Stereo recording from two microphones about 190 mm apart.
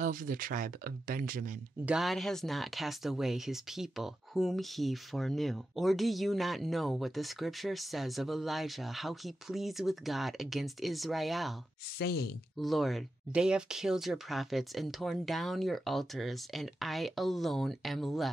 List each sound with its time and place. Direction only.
0.0 s speech: 45° right (ahead or behind)
1.9 s speech: centre (ahead or behind)
12.0 s speech: 60° left (ahead or behind)
12.5 s speech: centre (ahead or behind)